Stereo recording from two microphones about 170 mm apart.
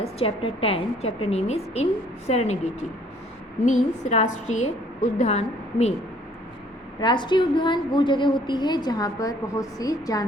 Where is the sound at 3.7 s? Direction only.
40° left (ahead or behind).